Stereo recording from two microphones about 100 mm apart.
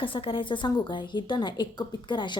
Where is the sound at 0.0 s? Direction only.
60° left (ahead or behind).